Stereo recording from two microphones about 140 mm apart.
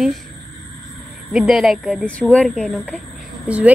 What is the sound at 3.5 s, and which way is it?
Speech, 10° right (ahead or behind).